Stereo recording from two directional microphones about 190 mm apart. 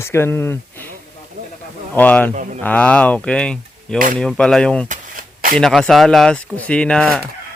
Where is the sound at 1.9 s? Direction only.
10° left (ahead or behind).